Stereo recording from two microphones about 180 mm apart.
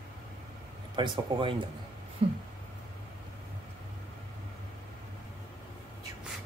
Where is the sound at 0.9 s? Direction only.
25° right (ahead or behind).